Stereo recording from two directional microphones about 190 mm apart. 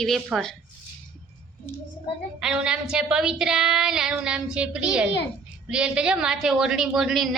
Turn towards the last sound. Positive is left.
turn(degrees=0)  # may be behind; listen again after turning